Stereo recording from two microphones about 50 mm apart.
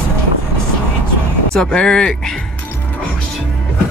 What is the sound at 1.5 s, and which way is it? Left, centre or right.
Speech, centre.